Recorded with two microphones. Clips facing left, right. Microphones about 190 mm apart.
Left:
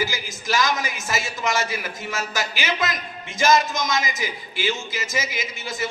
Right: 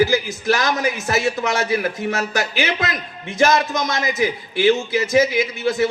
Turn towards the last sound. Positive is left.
turn(degrees=-65)  # may be behind; listen again after turning